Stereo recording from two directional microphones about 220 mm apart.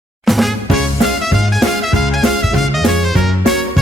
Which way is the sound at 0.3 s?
Centre (ahead or behind).